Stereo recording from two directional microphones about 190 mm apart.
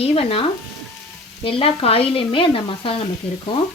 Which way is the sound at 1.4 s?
30° left (ahead or behind).